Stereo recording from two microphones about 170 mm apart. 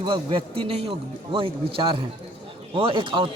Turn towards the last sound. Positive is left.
turn(degrees=-30)  # may be behind; listen again after turning